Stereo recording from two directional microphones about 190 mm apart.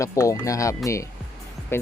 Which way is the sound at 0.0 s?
15° left (ahead or behind).